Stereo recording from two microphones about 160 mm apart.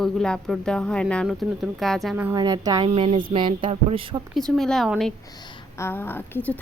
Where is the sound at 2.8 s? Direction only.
35° right (ahead or behind).